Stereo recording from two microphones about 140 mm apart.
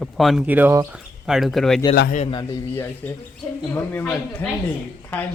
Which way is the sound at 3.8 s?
15° left (ahead or behind).